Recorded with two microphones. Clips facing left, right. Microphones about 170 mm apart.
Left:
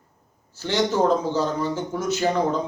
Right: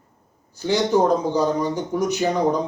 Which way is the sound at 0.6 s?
15° right (ahead or behind).